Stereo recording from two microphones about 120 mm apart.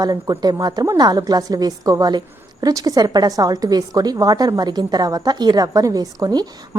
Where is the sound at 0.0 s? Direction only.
35° right (ahead or behind).